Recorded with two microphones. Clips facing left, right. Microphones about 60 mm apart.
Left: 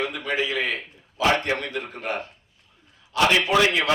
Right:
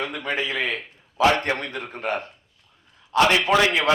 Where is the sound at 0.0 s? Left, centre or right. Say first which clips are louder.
Left 1 dB; right.